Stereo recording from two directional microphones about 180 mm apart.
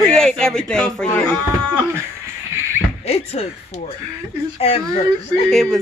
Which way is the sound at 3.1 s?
35° left (ahead or behind).